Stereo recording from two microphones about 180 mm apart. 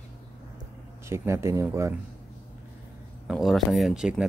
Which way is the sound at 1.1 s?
15° right (ahead or behind).